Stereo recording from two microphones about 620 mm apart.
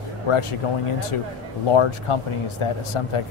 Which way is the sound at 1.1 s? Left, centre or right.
Left.